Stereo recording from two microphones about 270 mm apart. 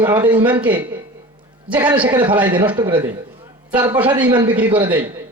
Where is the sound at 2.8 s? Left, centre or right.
Centre.